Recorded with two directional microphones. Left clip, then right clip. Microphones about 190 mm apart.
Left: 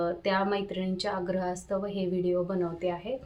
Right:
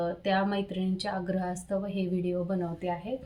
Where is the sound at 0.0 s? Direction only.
15° left (ahead or behind).